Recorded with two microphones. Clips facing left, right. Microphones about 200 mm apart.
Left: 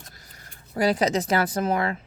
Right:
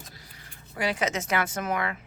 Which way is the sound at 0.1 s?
45° left (ahead or behind).